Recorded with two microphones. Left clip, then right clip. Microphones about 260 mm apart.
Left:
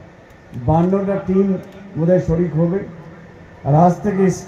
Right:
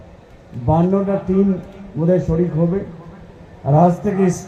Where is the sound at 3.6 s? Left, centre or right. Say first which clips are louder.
Even; left.